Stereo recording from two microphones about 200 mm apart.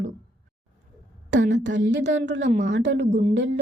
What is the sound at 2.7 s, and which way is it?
Speech, 60° right (ahead or behind).